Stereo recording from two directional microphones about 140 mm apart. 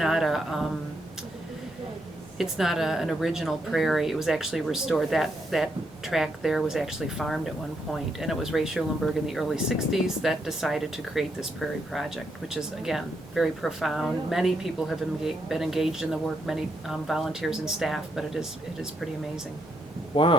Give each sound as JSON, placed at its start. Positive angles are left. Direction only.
{"t": 0.0, "sound": "speech", "side_deg": 0}
{"t": 2.4, "sound": "speech", "side_deg": 0}
{"t": 20.1, "sound": "speech", "side_deg": 40}